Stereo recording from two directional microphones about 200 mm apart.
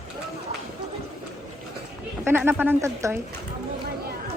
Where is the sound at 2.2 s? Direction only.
10° right (ahead or behind).